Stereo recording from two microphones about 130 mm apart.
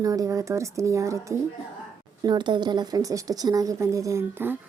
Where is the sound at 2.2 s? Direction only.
35° right (ahead or behind).